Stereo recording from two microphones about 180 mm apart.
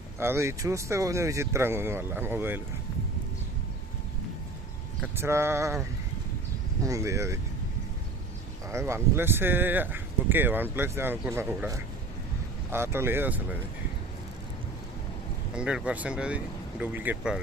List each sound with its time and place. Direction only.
0.2 s speech: 15° right (ahead or behind)
5.1 s speech: 15° right (ahead or behind)
6.8 s speech: 15° right (ahead or behind)
8.7 s speech: 15° right (ahead or behind)
15.5 s speech: 5° right (ahead or behind)